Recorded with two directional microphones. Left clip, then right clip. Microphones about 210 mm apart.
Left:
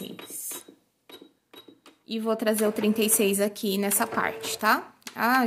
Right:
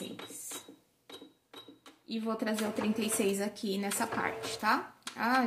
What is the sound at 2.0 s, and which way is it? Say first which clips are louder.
A woman's voice: left 9 dB; 60° left (ahead or behind).